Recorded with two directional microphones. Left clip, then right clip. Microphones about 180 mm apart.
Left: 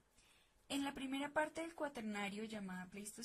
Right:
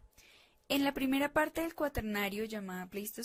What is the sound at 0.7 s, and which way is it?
A woman's voice, 30° right (ahead or behind).